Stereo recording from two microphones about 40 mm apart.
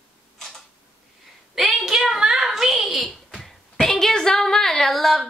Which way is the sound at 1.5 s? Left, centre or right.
Centre.